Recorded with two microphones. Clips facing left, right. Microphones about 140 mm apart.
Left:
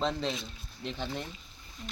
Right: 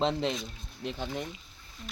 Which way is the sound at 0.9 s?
10° right (ahead or behind).